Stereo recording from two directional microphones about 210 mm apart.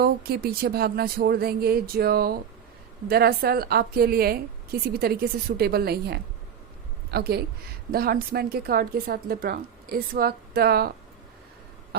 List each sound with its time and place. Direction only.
0.0 s a woman's voice: 45° right (ahead or behind)